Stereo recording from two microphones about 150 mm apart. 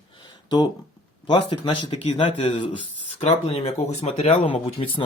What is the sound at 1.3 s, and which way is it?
Speech, 35° left (ahead or behind).